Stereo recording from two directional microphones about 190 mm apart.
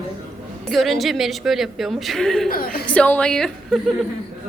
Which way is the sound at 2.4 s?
50° left (ahead or behind).